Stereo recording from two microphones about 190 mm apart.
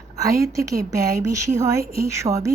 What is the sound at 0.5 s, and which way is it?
Speech, 15° right (ahead or behind).